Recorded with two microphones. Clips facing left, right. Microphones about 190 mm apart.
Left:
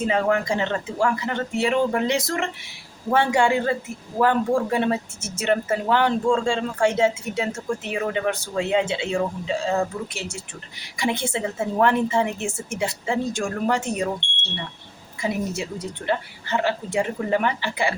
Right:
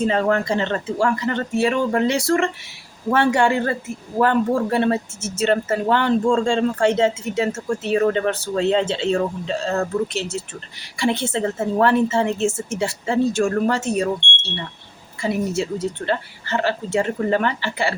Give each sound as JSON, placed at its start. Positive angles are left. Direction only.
{"t": 0.1, "sound": "a woman's voice", "side_deg": 10}